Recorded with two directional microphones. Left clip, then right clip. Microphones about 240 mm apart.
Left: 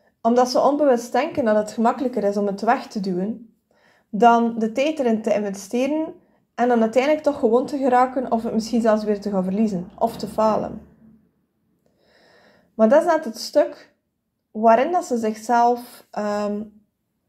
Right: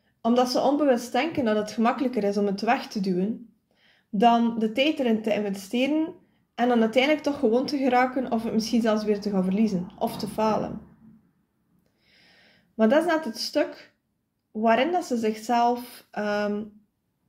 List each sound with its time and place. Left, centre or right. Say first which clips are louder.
0.2 s a woman's voice: left 5 dB; centre
0.9 s a woman's voice: left 5 dB; centre
1.3 s a woman's voice: left 6 dB; centre
12.1 s a sound: left 3 dB; centre
12.8 s a woman's voice: left 6 dB; centre